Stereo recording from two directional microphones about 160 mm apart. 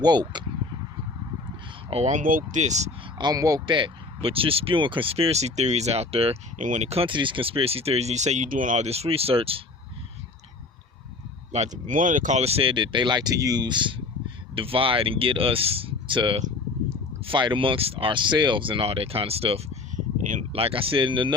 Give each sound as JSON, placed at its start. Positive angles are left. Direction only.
{"t": 0.0, "sound": "speech", "side_deg": -25}
{"t": 1.9, "sound": "speech", "side_deg": -45}
{"t": 3.2, "sound": "speech", "side_deg": -25}
{"t": 6.6, "sound": "speech", "side_deg": -50}
{"t": 11.5, "sound": "speech", "side_deg": -45}